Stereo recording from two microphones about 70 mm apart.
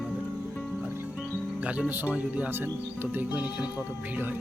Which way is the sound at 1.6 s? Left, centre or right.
Centre.